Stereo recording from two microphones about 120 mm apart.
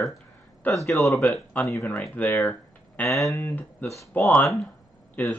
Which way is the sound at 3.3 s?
15° left (ahead or behind).